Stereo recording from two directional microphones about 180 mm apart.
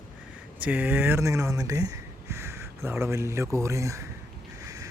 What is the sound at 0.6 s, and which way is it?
Speech, 10° right (ahead or behind).